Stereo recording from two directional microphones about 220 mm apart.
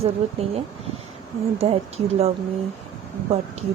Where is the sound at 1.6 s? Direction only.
25° right (ahead or behind).